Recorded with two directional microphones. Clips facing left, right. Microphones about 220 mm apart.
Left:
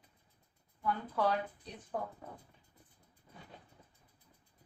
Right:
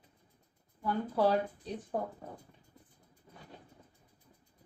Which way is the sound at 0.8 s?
30° right (ahead or behind).